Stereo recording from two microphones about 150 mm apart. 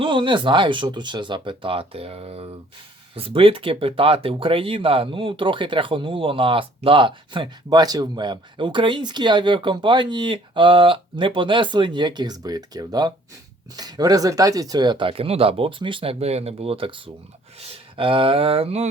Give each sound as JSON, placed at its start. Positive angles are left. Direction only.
{"t": 0.0, "sound": "speech", "side_deg": -35}